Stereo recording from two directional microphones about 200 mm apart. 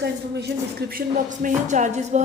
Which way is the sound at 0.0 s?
55° right (ahead or behind).